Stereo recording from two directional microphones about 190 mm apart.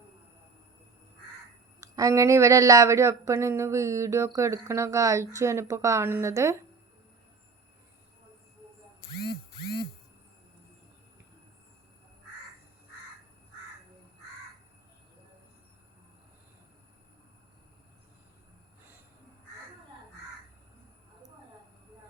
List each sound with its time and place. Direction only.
1.8 s speech: 15° right (ahead or behind)